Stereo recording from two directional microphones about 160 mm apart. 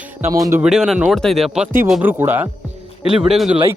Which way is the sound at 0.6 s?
5° right (ahead or behind).